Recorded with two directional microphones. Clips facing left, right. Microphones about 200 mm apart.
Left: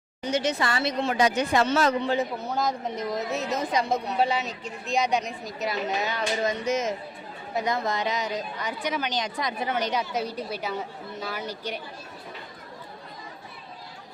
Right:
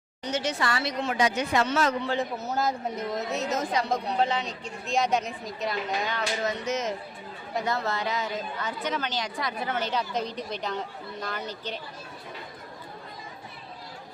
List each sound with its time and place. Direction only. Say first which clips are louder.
0.3 s a woman's voice: left 3 dB; 15° left (ahead or behind)
1.2 s speech: left 2 dB; 35° left (ahead or behind)
2.5 s a woman's voice: even; 5° right (ahead or behind); by 11.8 s 10° left (ahead or behind)